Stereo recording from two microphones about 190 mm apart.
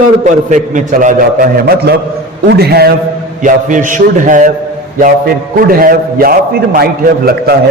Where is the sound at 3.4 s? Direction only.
40° right (ahead or behind).